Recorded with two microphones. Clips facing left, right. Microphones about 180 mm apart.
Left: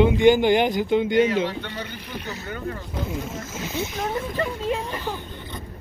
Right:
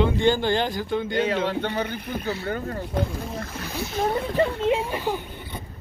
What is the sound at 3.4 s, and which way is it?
Speech, 20° left (ahead or behind).